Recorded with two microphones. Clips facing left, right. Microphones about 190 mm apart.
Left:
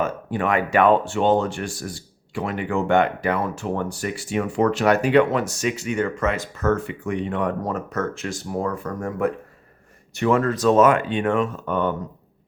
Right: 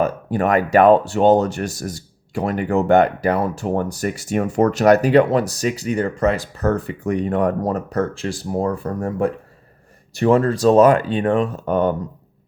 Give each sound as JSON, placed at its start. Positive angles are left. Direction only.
{"t": 0.0, "sound": "speech", "side_deg": -40}